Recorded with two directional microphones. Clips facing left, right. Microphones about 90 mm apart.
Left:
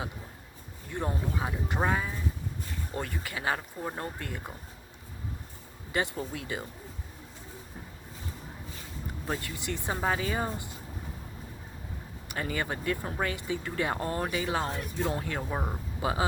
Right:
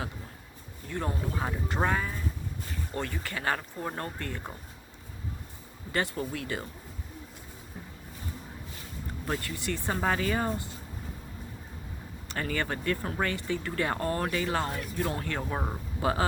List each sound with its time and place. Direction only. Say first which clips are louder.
0.9 s speech: even; 15° left (ahead or behind)
6.3 s speech: right 1 dB; 15° left (ahead or behind)
9.4 s speech: right 2 dB; 20° left (ahead or behind)
12.3 s speech: right 1 dB; 10° left (ahead or behind)